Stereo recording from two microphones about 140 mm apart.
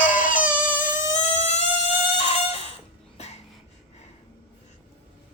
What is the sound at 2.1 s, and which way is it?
Chicken, 50° left (ahead or behind).